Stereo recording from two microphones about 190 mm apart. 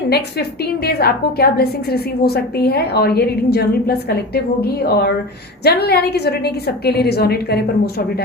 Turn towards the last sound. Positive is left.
turn(degrees=55)  # may be behind; listen again after turning